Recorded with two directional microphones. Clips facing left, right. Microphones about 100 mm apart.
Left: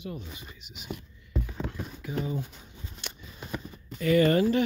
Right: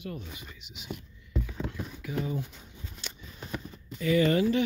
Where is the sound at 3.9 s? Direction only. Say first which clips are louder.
Left 2 dB; 50° left (ahead or behind).